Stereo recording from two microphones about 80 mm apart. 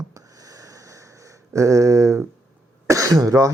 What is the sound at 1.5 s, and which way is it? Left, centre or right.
Speech, right.